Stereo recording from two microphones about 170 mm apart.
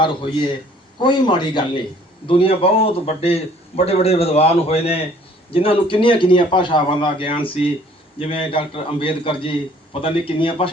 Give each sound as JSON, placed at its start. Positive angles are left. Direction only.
{"t": 0.0, "sound": "a man's voice", "side_deg": 30}